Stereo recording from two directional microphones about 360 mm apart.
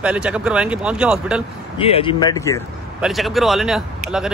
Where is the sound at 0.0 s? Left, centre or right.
Centre.